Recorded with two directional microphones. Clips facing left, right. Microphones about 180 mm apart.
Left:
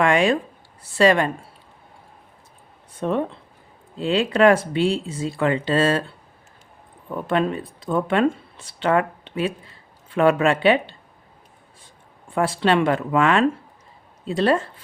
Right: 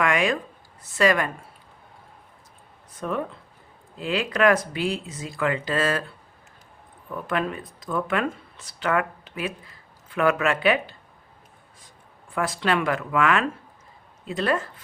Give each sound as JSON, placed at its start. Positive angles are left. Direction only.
{"t": 0.0, "sound": "speech", "side_deg": 30}
{"t": 3.0, "sound": "speech", "side_deg": 25}
{"t": 12.3, "sound": "speech", "side_deg": 30}